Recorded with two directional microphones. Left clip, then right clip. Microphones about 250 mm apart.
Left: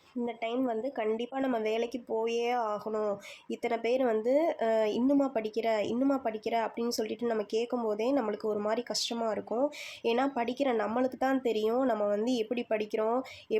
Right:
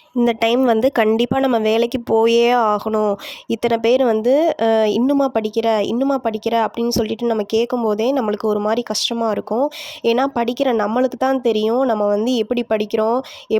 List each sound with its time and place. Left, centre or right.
0.3 s speech: right